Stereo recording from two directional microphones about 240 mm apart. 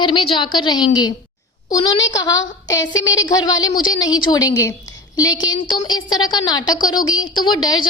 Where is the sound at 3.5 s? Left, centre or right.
Centre.